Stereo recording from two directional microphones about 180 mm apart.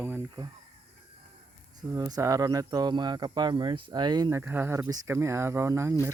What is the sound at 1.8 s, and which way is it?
Speech, 20° right (ahead or behind).